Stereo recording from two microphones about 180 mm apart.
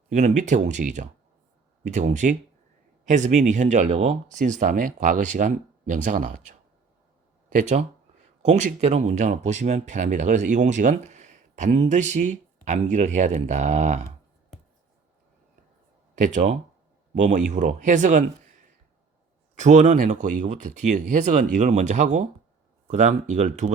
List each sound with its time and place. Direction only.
0.1 s speech: 45° right (ahead or behind)
16.1 s speech: 45° right (ahead or behind)
19.5 s speech: 40° right (ahead or behind)